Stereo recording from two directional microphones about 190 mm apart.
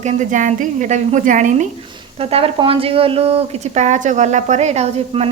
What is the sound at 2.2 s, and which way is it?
A woman's voice, 30° right (ahead or behind).